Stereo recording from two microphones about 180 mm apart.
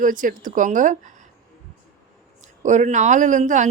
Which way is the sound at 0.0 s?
50° right (ahead or behind).